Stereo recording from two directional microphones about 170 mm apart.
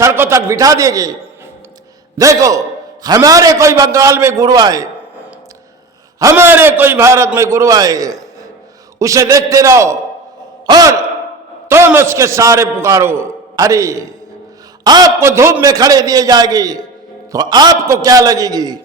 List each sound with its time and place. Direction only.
0.0 s a man's voice: 15° right (ahead or behind)
2.1 s a man's voice: 20° right (ahead or behind)
6.1 s a man's voice: 15° right (ahead or behind)